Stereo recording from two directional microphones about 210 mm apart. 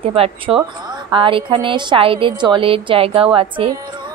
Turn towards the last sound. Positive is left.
turn(degrees=-25)  # may be behind; listen again after turning